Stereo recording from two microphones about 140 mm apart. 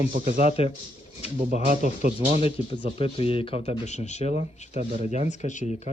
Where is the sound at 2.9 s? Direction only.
40° left (ahead or behind); by 5.8 s 55° left (ahead or behind).